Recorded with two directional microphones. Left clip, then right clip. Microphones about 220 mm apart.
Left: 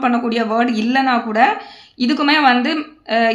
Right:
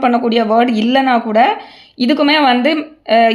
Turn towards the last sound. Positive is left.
turn(degrees=-35)  # may be behind; listen again after turning